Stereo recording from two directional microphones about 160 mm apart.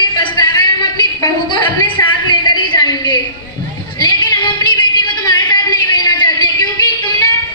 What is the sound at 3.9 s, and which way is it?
Music, 30° left (ahead or behind).